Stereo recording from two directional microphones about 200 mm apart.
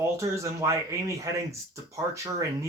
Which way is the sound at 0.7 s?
15° right (ahead or behind).